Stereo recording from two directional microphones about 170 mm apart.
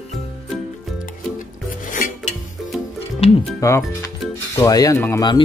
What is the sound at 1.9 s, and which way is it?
Filing, 50° left (ahead or behind).